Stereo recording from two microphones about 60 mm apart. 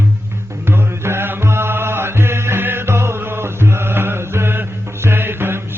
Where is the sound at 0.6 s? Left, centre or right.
Right.